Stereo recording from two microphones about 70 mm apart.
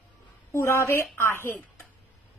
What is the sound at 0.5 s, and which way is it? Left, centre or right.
Speech, left.